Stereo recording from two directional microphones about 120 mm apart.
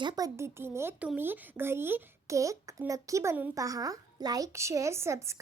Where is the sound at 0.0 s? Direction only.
40° right (ahead or behind).